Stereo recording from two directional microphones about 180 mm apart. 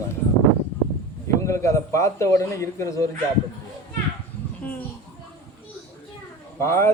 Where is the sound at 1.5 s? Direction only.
15° left (ahead or behind).